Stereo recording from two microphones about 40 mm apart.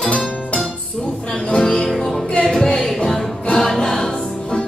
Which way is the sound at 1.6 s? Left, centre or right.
Centre.